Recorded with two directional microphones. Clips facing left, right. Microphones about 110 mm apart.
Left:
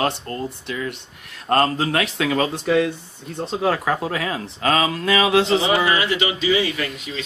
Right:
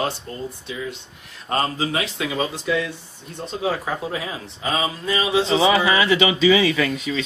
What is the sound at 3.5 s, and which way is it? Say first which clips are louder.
Speech: left 3 dB; 70° left (ahead or behind).